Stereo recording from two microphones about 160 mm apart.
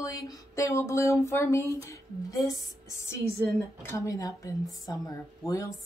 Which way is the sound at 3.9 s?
20° left (ahead or behind).